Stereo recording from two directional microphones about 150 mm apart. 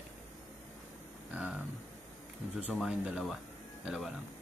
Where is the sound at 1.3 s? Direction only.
5° right (ahead or behind).